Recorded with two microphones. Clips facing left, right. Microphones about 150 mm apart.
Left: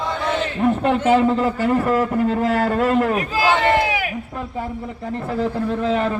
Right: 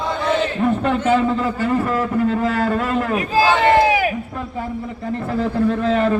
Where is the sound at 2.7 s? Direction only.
20° left (ahead or behind).